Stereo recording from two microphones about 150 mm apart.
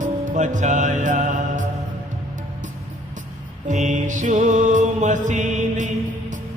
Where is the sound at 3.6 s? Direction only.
55° right (ahead or behind).